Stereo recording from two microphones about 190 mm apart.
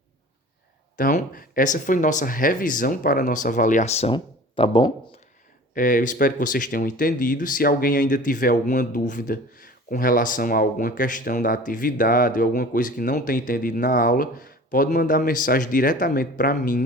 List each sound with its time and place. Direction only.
0.9 s speech: 50° left (ahead or behind); by 4.9 s 30° left (ahead or behind)
5.7 s speech: 45° left (ahead or behind)